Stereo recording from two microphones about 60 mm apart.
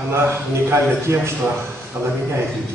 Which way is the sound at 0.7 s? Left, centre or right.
Right.